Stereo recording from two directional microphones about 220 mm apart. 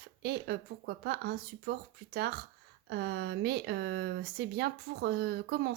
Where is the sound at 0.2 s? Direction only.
50° right (ahead or behind).